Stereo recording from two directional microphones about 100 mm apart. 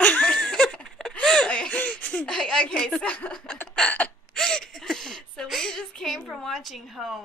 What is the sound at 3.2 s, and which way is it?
Chuckle, 10° left (ahead or behind).